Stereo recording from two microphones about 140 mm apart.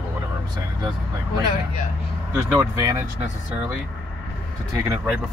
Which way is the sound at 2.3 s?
20° right (ahead or behind).